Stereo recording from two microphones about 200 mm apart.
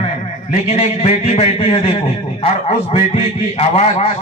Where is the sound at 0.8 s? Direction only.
30° left (ahead or behind).